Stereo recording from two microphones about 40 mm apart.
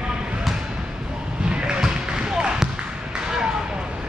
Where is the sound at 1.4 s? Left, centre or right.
Right.